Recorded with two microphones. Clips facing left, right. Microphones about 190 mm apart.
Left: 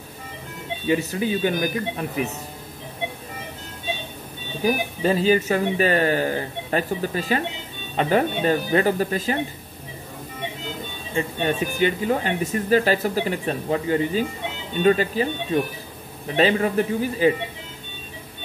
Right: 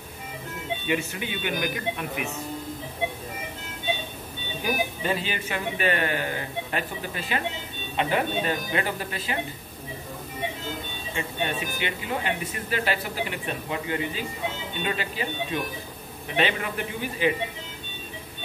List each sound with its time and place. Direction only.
0.8 s speech: 35° left (ahead or behind)
4.6 s speech: 35° left (ahead or behind)
11.1 s speech: 40° left (ahead or behind)